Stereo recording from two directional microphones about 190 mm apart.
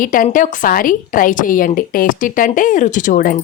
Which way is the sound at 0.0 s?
45° left (ahead or behind).